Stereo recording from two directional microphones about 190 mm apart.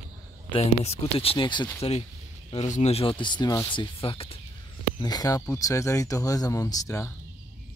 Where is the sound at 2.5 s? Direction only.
35° left (ahead or behind); by 7.1 s 15° left (ahead or behind).